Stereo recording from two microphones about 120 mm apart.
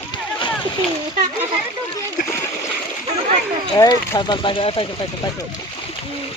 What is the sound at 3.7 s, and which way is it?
Speech, 30° left (ahead or behind).